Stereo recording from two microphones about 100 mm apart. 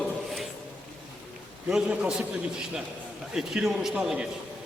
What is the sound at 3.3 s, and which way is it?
Speech, 5° right (ahead or behind).